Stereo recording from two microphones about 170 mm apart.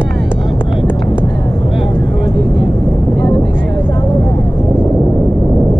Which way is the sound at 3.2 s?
15° left (ahead or behind).